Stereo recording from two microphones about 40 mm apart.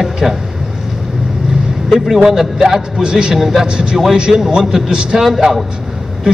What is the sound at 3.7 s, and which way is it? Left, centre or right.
A man's voice, right.